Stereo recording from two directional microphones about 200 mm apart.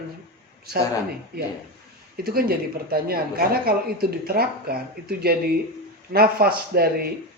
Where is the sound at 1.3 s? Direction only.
50° right (ahead or behind).